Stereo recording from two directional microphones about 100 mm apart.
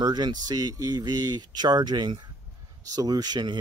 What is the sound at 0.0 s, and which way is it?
Speech, 45° right (ahead or behind).